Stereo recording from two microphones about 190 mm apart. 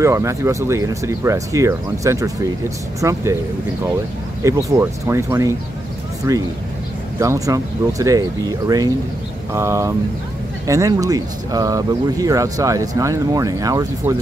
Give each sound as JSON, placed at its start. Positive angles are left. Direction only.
{"t": 0.0, "sound": "speech", "side_deg": -15}
{"t": 4.4, "sound": "speech", "side_deg": -15}